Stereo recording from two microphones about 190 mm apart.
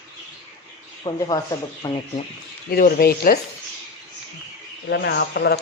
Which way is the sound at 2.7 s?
50° left (ahead or behind).